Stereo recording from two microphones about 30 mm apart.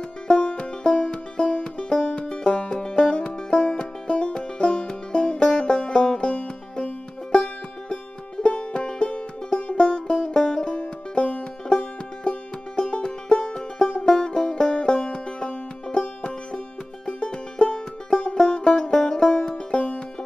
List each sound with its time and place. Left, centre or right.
0.3 s music: left
2.7 s music: left
7.3 s music: left
9.6 s music: left
9.8 s music: left
12.7 s music: left